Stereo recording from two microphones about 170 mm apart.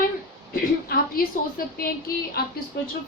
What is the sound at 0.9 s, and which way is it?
A woman's voice, 60° left (ahead or behind).